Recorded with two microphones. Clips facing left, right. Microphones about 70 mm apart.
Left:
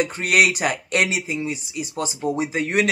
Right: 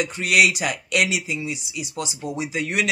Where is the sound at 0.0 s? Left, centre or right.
Left.